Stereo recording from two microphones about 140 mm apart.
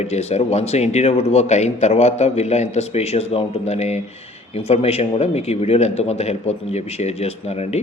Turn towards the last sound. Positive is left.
turn(degrees=50)  # may be behind; listen again after turning